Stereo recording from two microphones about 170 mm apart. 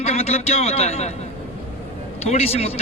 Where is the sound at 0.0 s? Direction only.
40° left (ahead or behind).